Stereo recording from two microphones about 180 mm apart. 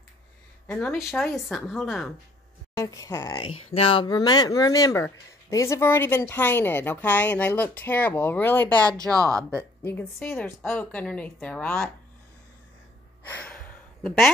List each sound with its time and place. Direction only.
0.7 s speech: 5° left (ahead or behind)
2.7 s speech: 15° left (ahead or behind)
9.1 s speech: 15° right (ahead or behind)
9.8 s speech: 10° left (ahead or behind)
13.2 s a sound: 10° left (ahead or behind)